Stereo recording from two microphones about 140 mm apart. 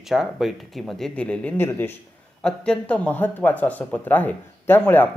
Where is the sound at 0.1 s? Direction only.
Centre (ahead or behind).